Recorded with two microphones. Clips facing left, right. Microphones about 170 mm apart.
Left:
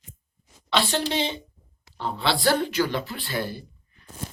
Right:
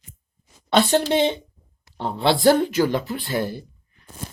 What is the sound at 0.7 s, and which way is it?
A woman's voice, 50° right (ahead or behind).